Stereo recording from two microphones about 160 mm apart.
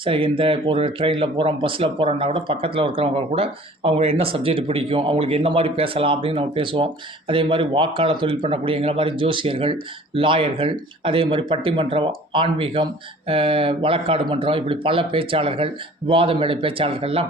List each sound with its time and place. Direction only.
0.0 s speech: 35° right (ahead or behind)